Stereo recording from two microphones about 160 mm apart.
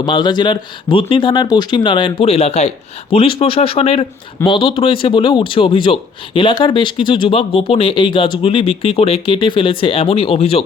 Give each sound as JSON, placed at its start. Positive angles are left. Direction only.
{"t": 0.0, "sound": "speech", "side_deg": 25}